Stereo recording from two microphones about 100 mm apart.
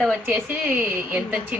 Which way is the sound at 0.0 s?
15° right (ahead or behind).